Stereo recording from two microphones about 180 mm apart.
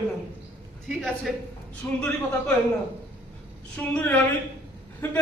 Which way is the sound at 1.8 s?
10° left (ahead or behind).